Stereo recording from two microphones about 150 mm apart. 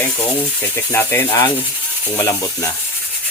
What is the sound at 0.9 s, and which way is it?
Speech, 20° left (ahead or behind).